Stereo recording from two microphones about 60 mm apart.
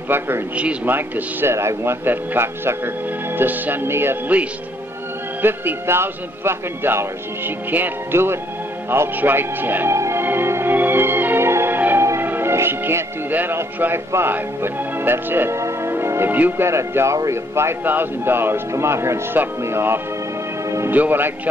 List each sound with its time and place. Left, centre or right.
0.1 s a man's voice: right
5.4 s a man's voice: right
9.9 s music: right
10.2 s music: right
12.2 s a man's voice: right
15.5 s music: right
16.3 s a man's voice: right
16.6 s speech: right
17.8 s a man's voice: right
18.7 s speech: right
20.9 s a man's voice: right